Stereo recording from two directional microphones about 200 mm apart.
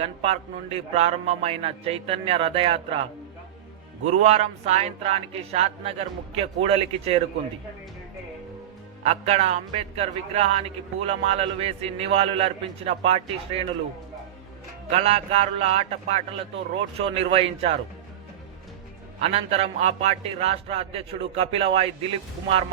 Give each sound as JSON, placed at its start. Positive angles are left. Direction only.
{"t": 0.0, "sound": "a man's voice", "side_deg": -30}
{"t": 4.0, "sound": "a man's voice", "side_deg": -30}
{"t": 9.0, "sound": "a man's voice", "side_deg": -35}
{"t": 14.9, "sound": "a man's voice", "side_deg": -35}
{"t": 19.2, "sound": "a man's voice", "side_deg": -30}